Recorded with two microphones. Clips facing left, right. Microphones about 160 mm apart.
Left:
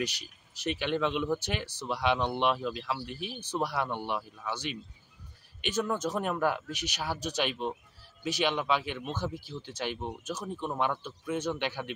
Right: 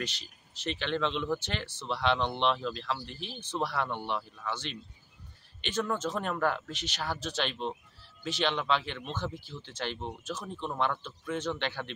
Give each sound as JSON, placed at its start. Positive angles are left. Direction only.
{"t": 0.7, "sound": "speech", "side_deg": 10}